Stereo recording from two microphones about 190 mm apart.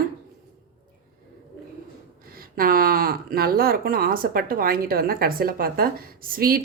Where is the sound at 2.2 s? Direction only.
50° right (ahead or behind).